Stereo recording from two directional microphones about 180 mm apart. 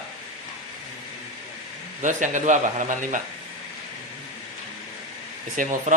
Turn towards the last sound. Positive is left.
turn(degrees=-50)  # may be behind; listen again after turning